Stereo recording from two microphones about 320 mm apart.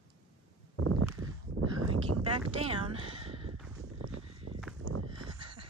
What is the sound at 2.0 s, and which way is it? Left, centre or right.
Speech, right.